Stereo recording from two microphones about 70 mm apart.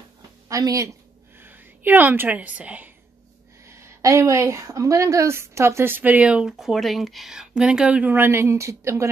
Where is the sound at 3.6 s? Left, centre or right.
Right; by 6.4 s centre.